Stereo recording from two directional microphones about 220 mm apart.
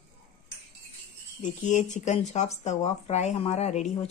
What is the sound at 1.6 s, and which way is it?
Speech, 35° left (ahead or behind).